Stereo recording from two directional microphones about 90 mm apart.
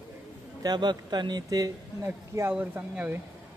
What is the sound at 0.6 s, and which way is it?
Speech, 55° right (ahead or behind).